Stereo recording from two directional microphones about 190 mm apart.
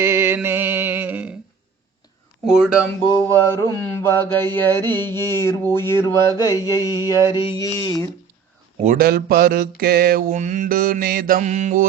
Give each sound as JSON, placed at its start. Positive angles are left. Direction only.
{"t": 0.0, "sound": "music", "side_deg": -15}
{"t": 3.2, "sound": "mantra", "side_deg": 15}
{"t": 8.8, "sound": "mantra", "side_deg": -45}